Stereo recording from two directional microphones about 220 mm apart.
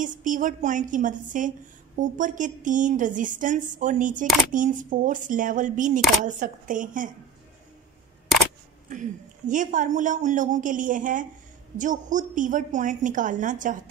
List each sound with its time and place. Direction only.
0.0 s a woman's voice: 35° right (ahead or behind)
9.5 s a woman's voice: 35° right (ahead or behind)